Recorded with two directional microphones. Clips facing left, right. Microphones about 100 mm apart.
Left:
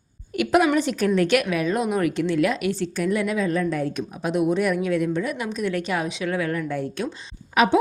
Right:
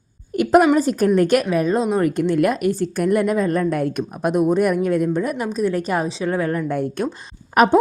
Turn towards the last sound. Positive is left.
turn(degrees=-45)  # may be behind; listen again after turning